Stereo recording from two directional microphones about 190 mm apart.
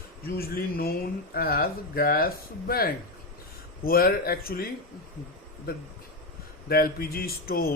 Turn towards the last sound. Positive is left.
turn(degrees=50)  # may be behind; listen again after turning